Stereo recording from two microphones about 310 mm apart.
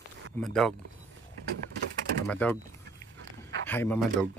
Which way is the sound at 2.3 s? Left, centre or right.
Centre.